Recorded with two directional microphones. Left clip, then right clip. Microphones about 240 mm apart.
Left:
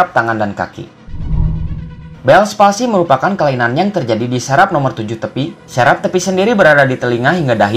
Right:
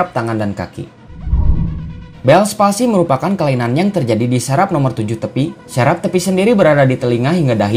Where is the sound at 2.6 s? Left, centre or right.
Right.